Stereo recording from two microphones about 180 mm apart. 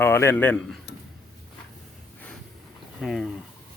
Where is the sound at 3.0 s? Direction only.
Centre (ahead or behind).